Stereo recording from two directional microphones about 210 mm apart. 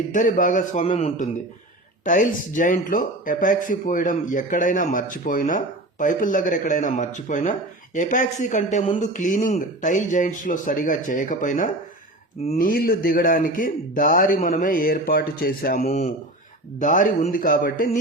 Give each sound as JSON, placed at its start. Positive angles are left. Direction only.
{"t": 0.1, "sound": "a man's voice", "side_deg": 40}